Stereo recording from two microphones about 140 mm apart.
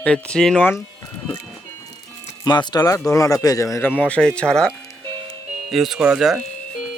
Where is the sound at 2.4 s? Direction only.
30° left (ahead or behind).